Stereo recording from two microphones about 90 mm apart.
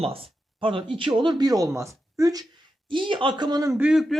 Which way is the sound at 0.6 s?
75° right (ahead or behind).